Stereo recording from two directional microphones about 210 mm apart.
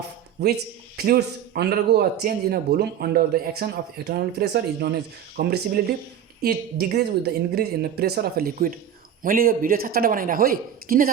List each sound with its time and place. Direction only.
0.4 s a man's voice: 50° right (ahead or behind)